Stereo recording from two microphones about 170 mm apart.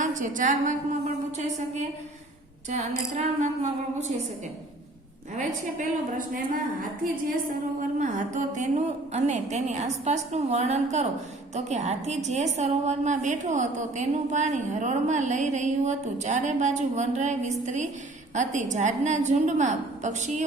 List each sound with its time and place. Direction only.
0.0 s a woman's voice: 50° right (ahead or behind)
5.4 s a woman's voice: 50° right (ahead or behind)
7.8 s a woman's voice: 45° right (ahead or behind)